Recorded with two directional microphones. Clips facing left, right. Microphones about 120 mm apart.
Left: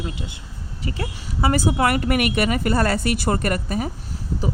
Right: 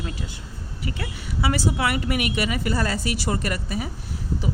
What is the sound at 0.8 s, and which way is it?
Speech, 40° left (ahead or behind).